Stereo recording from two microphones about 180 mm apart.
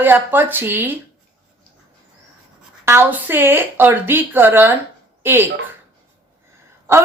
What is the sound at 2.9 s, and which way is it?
A woman's voice, 10° right (ahead or behind).